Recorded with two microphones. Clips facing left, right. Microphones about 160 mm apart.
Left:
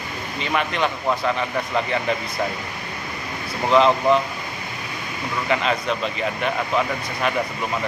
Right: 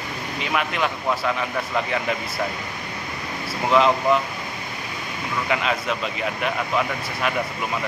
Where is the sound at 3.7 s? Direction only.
Centre (ahead or behind).